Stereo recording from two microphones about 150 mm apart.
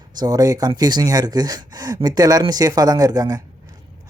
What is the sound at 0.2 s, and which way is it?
Speech, 25° right (ahead or behind).